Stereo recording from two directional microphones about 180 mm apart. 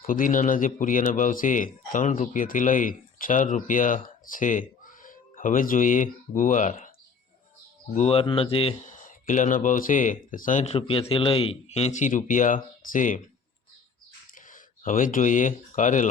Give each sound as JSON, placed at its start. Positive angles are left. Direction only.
{"t": 0.0, "sound": "a man's voice", "side_deg": 50}
{"t": 7.9, "sound": "speech", "side_deg": 35}
{"t": 8.9, "sound": "speech", "side_deg": 45}
{"t": 10.8, "sound": "a man's voice", "side_deg": 30}
{"t": 14.5, "sound": "speech", "side_deg": 45}